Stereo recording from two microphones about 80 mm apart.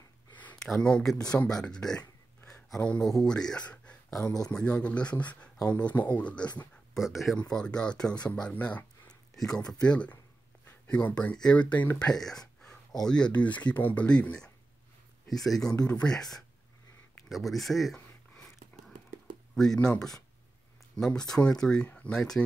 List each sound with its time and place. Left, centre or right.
0.7 s speech: centre
6.9 s speech: centre
7.4 s speech: centre
9.3 s speech: centre
19.5 s speech: centre